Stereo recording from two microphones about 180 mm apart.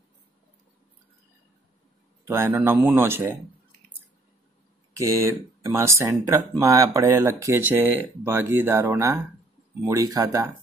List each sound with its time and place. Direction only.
2.2 s speech: 15° right (ahead or behind)
4.9 s speech: 15° right (ahead or behind)